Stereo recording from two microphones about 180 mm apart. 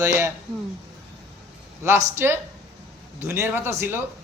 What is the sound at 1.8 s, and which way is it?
A man's voice, 15° right (ahead or behind).